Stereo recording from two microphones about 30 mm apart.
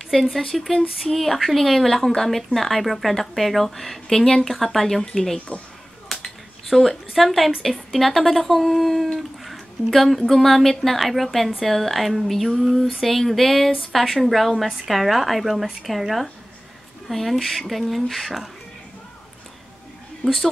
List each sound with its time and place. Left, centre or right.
0.0 s speech: centre
6.6 s speech: centre
20.2 s a woman's voice: left